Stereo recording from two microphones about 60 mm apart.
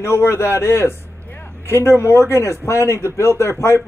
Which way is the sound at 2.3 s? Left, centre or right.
Left.